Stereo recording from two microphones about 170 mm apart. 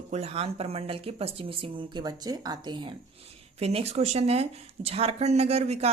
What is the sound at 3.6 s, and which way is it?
Speech, 35° right (ahead or behind).